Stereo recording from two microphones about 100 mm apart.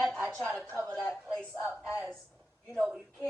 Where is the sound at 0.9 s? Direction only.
10° left (ahead or behind).